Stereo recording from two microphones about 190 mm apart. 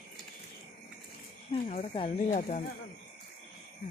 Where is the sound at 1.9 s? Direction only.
35° left (ahead or behind).